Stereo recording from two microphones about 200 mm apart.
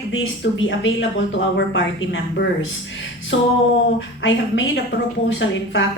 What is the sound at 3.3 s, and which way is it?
A woman's voice, 70° left (ahead or behind).